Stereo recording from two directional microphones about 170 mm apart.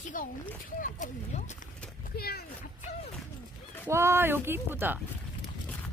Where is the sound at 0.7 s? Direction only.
45° left (ahead or behind).